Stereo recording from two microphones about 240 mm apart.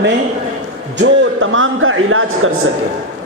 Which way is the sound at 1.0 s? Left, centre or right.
Right.